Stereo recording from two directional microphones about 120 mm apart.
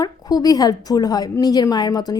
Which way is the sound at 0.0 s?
30° left (ahead or behind).